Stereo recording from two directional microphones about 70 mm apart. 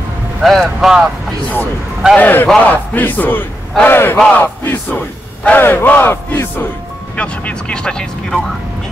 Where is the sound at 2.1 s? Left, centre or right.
Left.